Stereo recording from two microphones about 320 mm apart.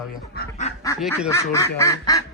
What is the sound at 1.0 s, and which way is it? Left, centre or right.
Speech, centre.